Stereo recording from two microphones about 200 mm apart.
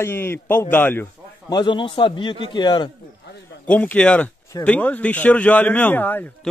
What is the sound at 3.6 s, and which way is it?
A man's voice, 5° left (ahead or behind).